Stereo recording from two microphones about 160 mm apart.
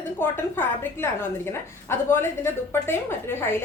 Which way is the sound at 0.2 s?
15° left (ahead or behind).